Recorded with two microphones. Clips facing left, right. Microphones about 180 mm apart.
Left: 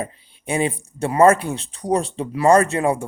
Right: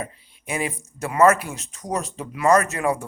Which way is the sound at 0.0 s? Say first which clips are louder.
Left 4 dB; 30° left (ahead or behind).